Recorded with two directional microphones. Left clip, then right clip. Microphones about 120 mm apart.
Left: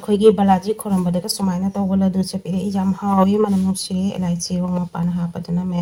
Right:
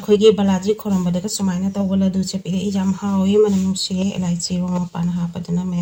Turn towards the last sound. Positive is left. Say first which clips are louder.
# even
turn(degrees=10)  # may be behind; listen again after turning